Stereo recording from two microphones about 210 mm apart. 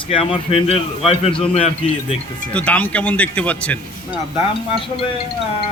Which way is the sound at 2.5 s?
5° left (ahead or behind).